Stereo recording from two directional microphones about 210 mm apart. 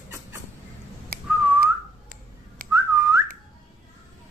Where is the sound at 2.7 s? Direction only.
15° right (ahead or behind).